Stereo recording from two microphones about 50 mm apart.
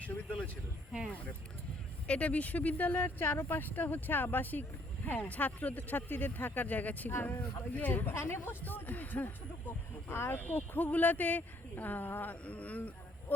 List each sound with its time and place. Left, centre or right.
0.0 s speech: left
2.0 s speech: left
7.1 s speech: left
8.6 s speech: left
10.1 s speech: left
10.4 s speech: left
12.3 s speech: left